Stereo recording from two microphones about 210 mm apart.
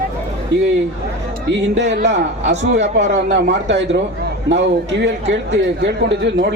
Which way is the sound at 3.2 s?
55° right (ahead or behind).